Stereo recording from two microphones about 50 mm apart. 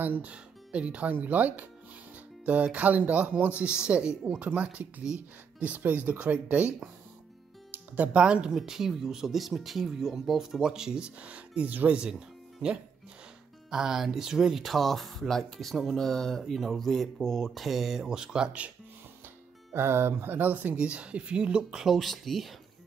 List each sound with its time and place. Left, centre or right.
0.0 s speech: right
0.3 s speech: right
3.8 s speech: centre
4.5 s speech: right
7.7 s music: right
8.1 s speech: right
13.7 s speech: centre
19.7 s speech: right
20.7 s speech: right
21.9 s speech: centre